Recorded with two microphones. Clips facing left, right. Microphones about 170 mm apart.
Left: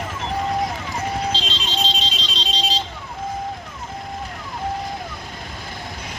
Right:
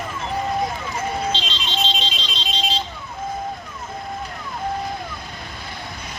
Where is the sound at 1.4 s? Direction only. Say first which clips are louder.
Even; 35° left (ahead or behind).